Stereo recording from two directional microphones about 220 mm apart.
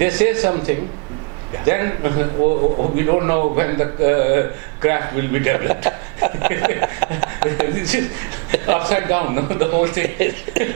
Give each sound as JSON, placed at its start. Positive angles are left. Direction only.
{"t": 0.0, "sound": "a man's voice", "side_deg": -10}
{"t": 2.6, "sound": "a man's voice", "side_deg": -30}
{"t": 3.0, "sound": "a man's voice", "side_deg": -15}